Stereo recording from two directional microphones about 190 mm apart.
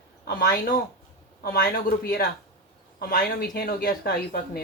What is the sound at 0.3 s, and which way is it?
Speech, 55° left (ahead or behind).